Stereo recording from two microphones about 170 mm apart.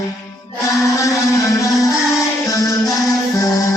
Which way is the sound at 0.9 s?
20° left (ahead or behind).